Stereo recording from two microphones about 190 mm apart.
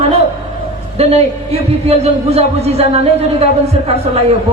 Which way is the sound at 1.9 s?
30° right (ahead or behind).